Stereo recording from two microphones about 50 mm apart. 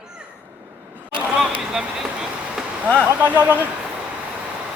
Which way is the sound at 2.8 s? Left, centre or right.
Right.